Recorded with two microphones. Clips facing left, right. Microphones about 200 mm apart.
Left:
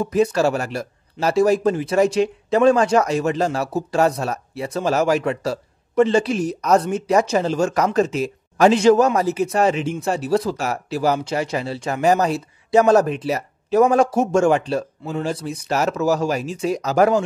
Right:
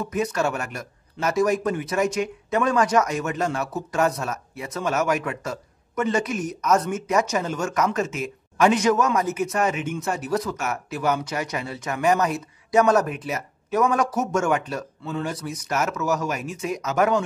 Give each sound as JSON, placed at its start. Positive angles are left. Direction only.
{"t": 0.0, "sound": "a man's voice", "side_deg": 30}